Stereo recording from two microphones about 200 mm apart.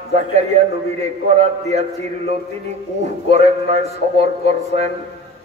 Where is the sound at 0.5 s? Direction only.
35° right (ahead or behind).